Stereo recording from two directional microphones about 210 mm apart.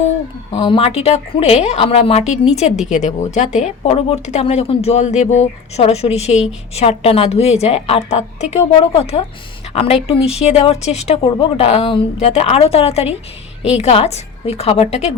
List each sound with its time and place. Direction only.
0.5 s a woman's voice: 20° left (ahead or behind)